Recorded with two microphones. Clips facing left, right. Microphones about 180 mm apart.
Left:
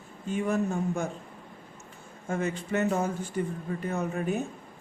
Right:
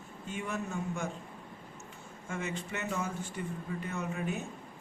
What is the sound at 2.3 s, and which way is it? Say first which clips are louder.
Speech: left 8 dB; 35° left (ahead or behind).